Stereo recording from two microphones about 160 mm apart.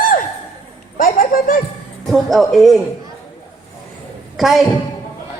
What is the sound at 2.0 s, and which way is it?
Speech, centre (ahead or behind).